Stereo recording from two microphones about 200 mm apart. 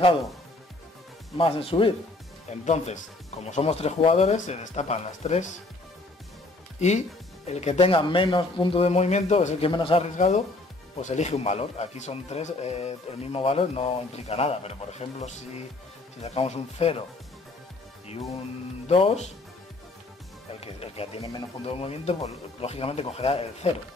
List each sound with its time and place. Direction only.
1.4 s speech: 30° left (ahead or behind)
6.8 s speech: 35° left (ahead or behind)
18.9 s speech: 30° left (ahead or behind)
20.6 s speech: 30° left (ahead or behind)